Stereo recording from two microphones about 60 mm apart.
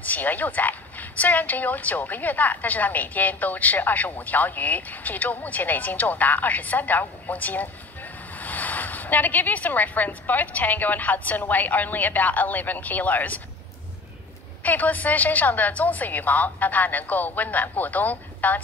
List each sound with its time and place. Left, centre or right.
0.0 s a woman's voice: left
14.6 s a woman's voice: left